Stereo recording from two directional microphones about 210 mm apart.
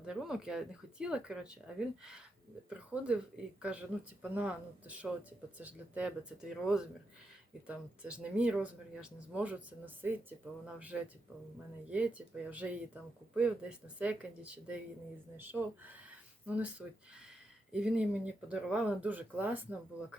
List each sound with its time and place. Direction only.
0.0 s speech: 5° right (ahead or behind)